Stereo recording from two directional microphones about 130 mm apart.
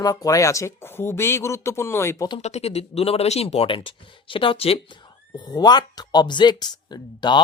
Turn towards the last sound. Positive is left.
turn(degrees=35)  # may be behind; listen again after turning